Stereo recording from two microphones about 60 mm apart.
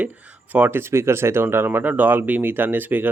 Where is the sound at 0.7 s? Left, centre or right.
Right.